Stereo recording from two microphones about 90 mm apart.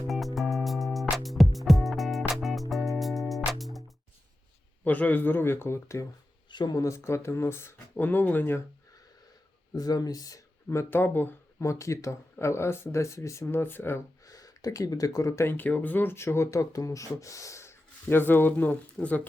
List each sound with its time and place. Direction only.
0.3 s music: centre (ahead or behind)
4.8 s speech: 15° left (ahead or behind)
6.5 s speech: 55° left (ahead or behind)
6.7 s speech: 35° left (ahead or behind)
9.7 s speech: 45° left (ahead or behind); by 11.3 s 25° left (ahead or behind)
11.6 s speech: 35° left (ahead or behind)
14.3 s speech: 40° left (ahead or behind); by 19.3 s 15° left (ahead or behind)